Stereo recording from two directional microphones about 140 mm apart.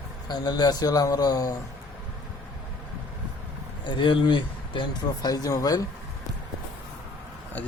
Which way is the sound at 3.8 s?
35° left (ahead or behind).